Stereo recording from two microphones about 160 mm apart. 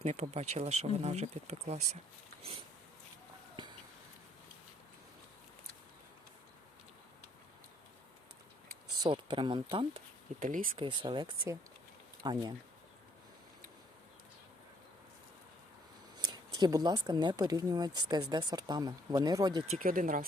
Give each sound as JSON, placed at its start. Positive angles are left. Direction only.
{"t": 0.0, "sound": "speech", "side_deg": -40}
{"t": 9.0, "sound": "speech", "side_deg": -30}
{"t": 10.4, "sound": "speech", "side_deg": -55}
{"t": 10.8, "sound": "speech", "side_deg": -30}
{"t": 16.1, "sound": "speech", "side_deg": -25}
{"t": 19.7, "sound": "speech", "side_deg": -60}